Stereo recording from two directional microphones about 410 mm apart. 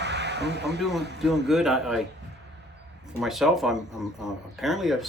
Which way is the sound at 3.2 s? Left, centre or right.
Centre.